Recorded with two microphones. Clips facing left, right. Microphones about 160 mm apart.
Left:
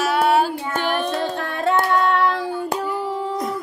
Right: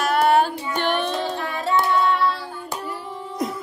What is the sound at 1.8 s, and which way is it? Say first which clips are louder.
Child singing: right 1 dB; 45° left (ahead or behind).